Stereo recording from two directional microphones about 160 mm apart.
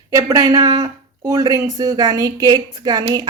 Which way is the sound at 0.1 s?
20° right (ahead or behind).